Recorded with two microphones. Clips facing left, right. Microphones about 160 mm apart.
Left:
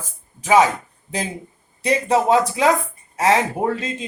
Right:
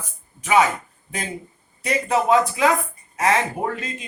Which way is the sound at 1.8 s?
25° left (ahead or behind).